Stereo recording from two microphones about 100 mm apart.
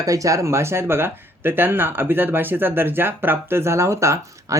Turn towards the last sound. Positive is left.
turn(degrees=-30)  # may be behind; listen again after turning